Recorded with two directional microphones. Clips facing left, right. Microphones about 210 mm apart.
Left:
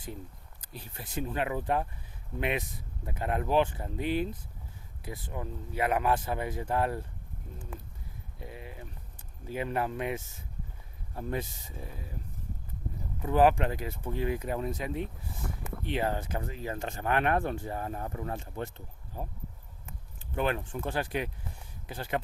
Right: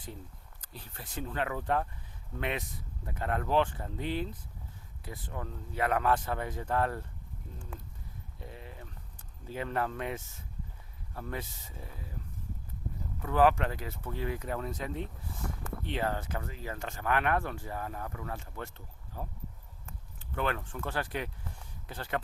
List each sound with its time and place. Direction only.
0.6 s speech: 15° left (ahead or behind)
8.4 s speech: 10° left (ahead or behind)
13.2 s speech: 20° left (ahead or behind)
20.3 s speech: 20° left (ahead or behind)